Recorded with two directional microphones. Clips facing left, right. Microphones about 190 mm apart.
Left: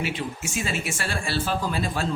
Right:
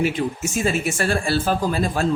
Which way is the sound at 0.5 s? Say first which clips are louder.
Right 7 dB; 45° right (ahead or behind).